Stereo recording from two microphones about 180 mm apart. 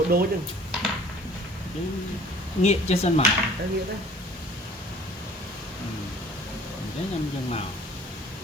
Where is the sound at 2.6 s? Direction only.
35° left (ahead or behind).